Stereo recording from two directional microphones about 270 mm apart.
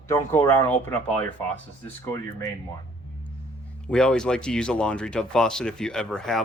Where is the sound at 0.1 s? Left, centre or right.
Centre.